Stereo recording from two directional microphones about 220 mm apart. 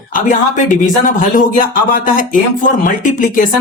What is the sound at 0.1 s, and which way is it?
Speech, 35° left (ahead or behind).